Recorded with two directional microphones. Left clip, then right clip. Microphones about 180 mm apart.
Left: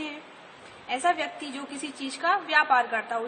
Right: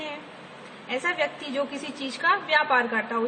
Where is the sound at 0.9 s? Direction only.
25° left (ahead or behind).